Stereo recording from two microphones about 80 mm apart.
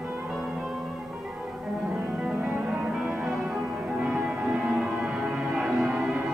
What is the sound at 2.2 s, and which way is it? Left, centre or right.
Music, centre.